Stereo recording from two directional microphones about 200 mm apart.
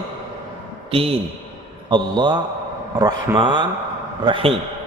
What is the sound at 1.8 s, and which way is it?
A man's voice, 20° right (ahead or behind).